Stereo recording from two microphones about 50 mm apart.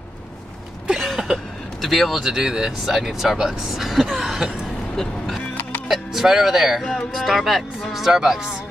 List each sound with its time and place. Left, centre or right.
1.0 s vehicle: centre
2.8 s speech: centre
4.9 s speech: centre
5.9 s speech: centre
6.8 s speech: centre
7.2 s speech: centre